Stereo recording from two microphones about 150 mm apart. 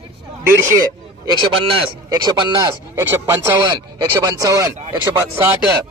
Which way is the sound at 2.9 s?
15° right (ahead or behind).